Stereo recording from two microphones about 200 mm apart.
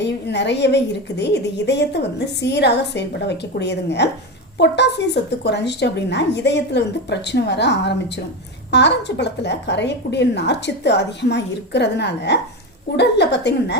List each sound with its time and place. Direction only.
0.0 s a woman's voice: 60° left (ahead or behind)